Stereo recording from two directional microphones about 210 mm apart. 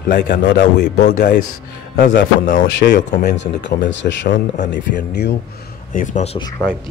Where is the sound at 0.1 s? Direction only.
50° left (ahead or behind).